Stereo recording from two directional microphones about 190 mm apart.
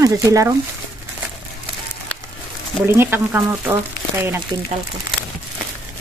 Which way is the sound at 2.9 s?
10° right (ahead or behind).